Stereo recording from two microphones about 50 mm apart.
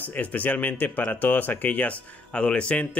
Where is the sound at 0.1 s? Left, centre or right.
Left.